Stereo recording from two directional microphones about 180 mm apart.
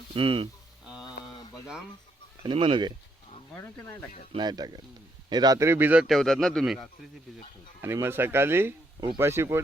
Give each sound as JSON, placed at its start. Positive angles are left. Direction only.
{"t": 0.1, "sound": "speech", "side_deg": -30}
{"t": 1.0, "sound": "a sound", "side_deg": 20}
{"t": 2.4, "sound": "speech", "side_deg": -30}
{"t": 4.3, "sound": "a man's voice", "side_deg": -25}
{"t": 7.8, "sound": "speech", "side_deg": -15}